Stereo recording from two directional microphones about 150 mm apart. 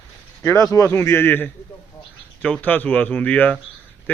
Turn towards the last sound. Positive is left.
turn(degrees=10)  # may be behind; listen again after turning